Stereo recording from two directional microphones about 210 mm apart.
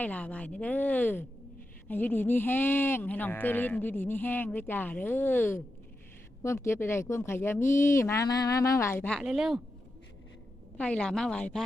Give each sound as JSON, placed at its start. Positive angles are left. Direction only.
{"t": 0.0, "sound": "speech", "side_deg": 5}
{"t": 10.8, "sound": "a woman's voice", "side_deg": 5}